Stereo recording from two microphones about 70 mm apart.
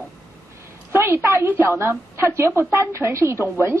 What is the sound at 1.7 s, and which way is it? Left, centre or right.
A woman's voice, right.